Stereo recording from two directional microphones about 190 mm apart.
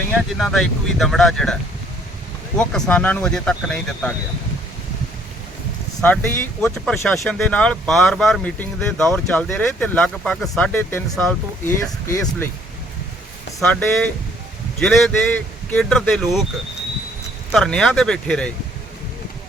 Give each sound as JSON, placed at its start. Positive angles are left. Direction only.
{"t": 0.1, "sound": "speech", "side_deg": 0}
{"t": 2.6, "sound": "speech", "side_deg": 5}
{"t": 6.0, "sound": "speech", "side_deg": 10}
{"t": 13.6, "sound": "speech", "side_deg": 5}
{"t": 17.5, "sound": "speech", "side_deg": 5}